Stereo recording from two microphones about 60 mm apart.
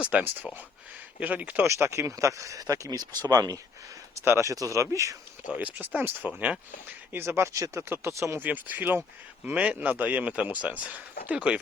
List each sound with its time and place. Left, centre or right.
0.0 s speech: right
1.6 s speech: right
4.4 s speech: right
5.5 s speech: right
6.2 s speech: centre
7.1 s speech: right
7.3 s speech: right
7.8 s speech: right
8.4 s speech: right